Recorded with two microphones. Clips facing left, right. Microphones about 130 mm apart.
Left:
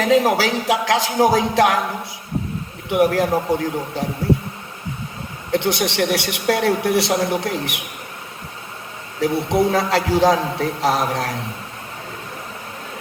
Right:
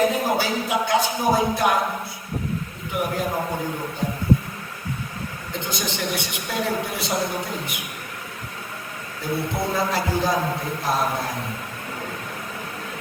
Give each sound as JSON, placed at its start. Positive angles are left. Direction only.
{"t": 0.0, "sound": "a man's voice", "side_deg": 90}
{"t": 2.9, "sound": "a man's voice", "side_deg": 85}
{"t": 5.5, "sound": "a woman's voice", "side_deg": 75}
{"t": 9.2, "sound": "a man's voice", "side_deg": 85}